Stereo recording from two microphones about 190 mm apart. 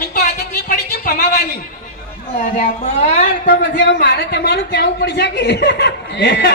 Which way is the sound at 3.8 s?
65° left (ahead or behind).